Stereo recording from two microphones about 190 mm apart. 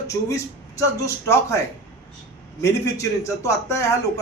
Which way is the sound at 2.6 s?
15° left (ahead or behind).